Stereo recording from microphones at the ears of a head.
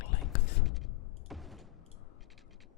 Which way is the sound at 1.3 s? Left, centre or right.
Centre.